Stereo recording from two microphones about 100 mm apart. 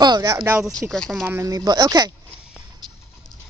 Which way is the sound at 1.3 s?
35° right (ahead or behind).